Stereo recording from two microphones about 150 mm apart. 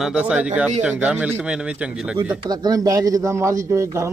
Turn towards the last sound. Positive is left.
turn(degrees=-20)  # may be behind; listen again after turning